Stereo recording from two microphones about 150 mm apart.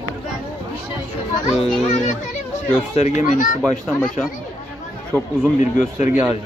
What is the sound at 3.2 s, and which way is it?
Speech, 65° left (ahead or behind).